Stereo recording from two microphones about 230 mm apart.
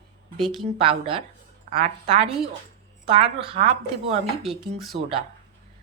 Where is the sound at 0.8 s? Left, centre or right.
Right.